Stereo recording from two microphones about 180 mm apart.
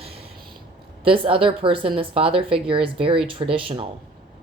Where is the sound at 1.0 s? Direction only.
30° right (ahead or behind).